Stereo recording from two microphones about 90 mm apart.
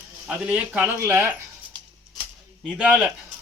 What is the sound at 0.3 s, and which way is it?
Speech, 10° right (ahead or behind).